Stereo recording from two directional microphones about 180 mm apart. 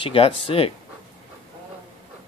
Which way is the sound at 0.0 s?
30° left (ahead or behind).